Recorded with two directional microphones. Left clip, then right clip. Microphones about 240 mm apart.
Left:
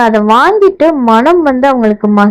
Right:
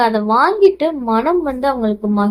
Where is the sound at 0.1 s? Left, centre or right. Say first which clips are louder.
Left 7 dB; left.